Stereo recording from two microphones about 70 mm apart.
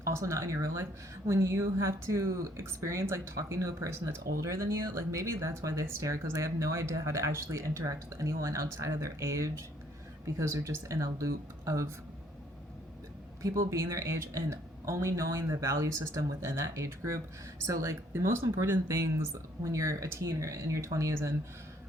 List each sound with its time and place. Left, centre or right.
0.0 s speech: right
13.4 s speech: right
18.1 s speech: right